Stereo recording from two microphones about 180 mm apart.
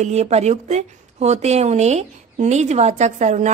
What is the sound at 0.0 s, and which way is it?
Speech, 35° right (ahead or behind).